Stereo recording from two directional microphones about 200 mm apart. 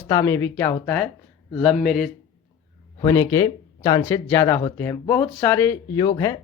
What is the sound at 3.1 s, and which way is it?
Speech, 15° left (ahead or behind).